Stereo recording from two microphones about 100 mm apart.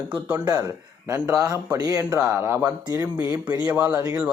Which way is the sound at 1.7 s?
35° right (ahead or behind).